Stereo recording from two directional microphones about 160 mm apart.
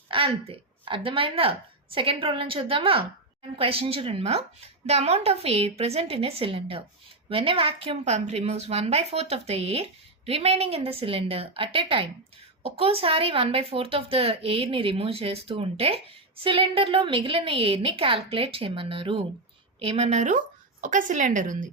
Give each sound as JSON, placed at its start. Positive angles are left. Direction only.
{"t": 0.1, "sound": "a woman's voice", "side_deg": -35}